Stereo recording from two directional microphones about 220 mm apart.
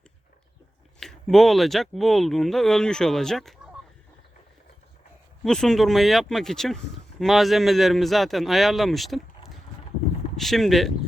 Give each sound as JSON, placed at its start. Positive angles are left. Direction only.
{"t": 0.9, "sound": "speech", "side_deg": 0}
{"t": 5.4, "sound": "speech", "side_deg": 0}
{"t": 10.3, "sound": "speech", "side_deg": 0}